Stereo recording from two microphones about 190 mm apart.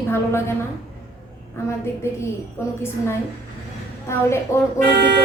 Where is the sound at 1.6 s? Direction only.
15° left (ahead or behind).